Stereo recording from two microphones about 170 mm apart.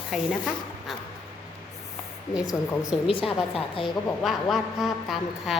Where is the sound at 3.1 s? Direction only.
35° left (ahead or behind).